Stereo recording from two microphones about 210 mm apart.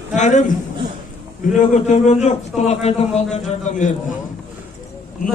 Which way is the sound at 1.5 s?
35° left (ahead or behind).